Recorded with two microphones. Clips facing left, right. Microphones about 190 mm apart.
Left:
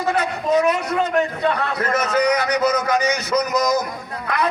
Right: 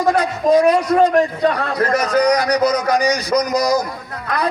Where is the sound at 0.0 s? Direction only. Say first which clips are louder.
Right 5 dB; 35° right (ahead or behind).